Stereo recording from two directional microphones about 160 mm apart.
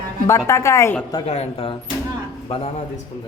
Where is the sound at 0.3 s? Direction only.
15° left (ahead or behind).